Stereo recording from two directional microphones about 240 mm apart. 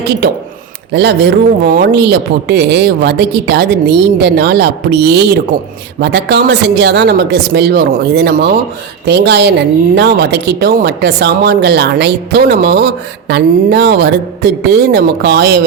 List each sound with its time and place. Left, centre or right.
0.2 s a man's voice: right